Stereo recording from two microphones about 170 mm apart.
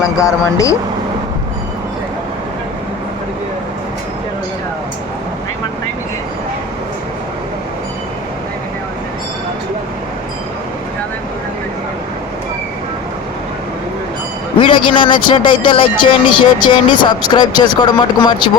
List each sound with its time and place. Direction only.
0.2 s speech: 20° left (ahead or behind)
14.6 s speech: 30° left (ahead or behind)